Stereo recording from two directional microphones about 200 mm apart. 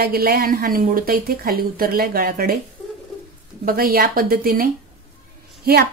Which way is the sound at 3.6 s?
50° right (ahead or behind).